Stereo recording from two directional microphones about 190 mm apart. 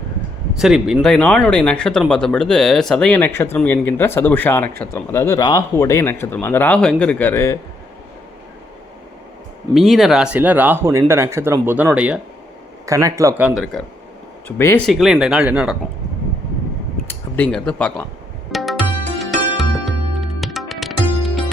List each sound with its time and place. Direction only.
0.6 s speech: centre (ahead or behind); by 7.6 s 15° left (ahead or behind)
9.7 s speech: centre (ahead or behind)
12.8 s speech: 15° right (ahead or behind)
13.7 s speech: 5° left (ahead or behind)
14.4 s speech: 15° left (ahead or behind)
14.8 s speech: centre (ahead or behind)
17.3 s speech: 5° left (ahead or behind)
18.5 s music: centre (ahead or behind)